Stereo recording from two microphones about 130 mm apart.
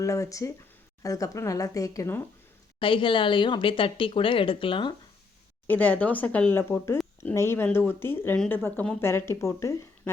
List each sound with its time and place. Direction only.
0.0 s speech: 25° left (ahead or behind)
2.7 s speech: 40° left (ahead or behind)
5.6 s speech: 15° left (ahead or behind)